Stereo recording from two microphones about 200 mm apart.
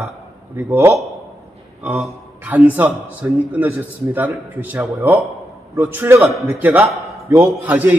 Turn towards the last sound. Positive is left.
turn(degrees=-10)  # may be behind; listen again after turning